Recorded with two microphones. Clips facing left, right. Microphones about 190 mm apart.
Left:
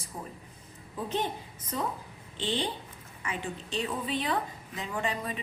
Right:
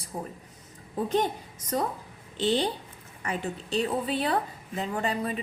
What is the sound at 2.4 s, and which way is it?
A woman's voice, 40° right (ahead or behind).